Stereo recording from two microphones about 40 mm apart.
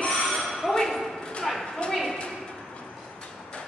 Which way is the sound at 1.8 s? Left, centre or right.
Left.